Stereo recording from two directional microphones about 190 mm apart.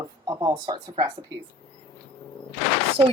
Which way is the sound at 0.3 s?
20° right (ahead or behind).